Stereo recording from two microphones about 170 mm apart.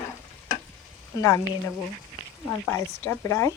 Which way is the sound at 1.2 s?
20° left (ahead or behind).